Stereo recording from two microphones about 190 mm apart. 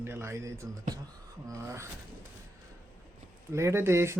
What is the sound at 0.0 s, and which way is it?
Speech, 10° right (ahead or behind).